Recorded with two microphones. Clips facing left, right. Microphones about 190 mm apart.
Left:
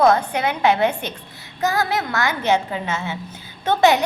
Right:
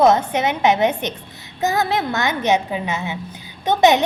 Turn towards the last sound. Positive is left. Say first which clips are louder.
# right 2 dB
turn(degrees=-20)  # may be behind; listen again after turning